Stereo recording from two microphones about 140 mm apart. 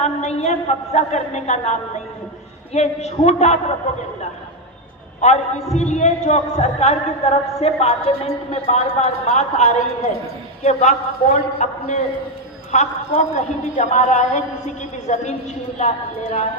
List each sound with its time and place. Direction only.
0.0 s a sound: 50° left (ahead or behind)
0.9 s a woman's voice: 55° left (ahead or behind)
5.2 s a man's voice: 55° left (ahead or behind)